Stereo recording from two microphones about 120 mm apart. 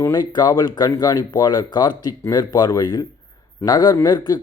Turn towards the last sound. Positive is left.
turn(degrees=35)  # may be behind; listen again after turning